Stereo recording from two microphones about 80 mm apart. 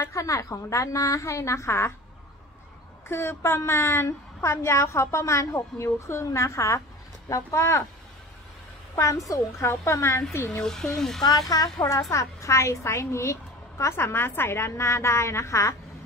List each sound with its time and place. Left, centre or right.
0.0 s a woman's voice: left
3.1 s a woman's voice: left
9.3 s a woman's voice: left
10.6 s speech: centre
11.2 s a woman's voice: left